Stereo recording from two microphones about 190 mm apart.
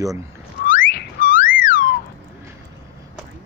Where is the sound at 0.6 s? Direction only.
55° left (ahead or behind).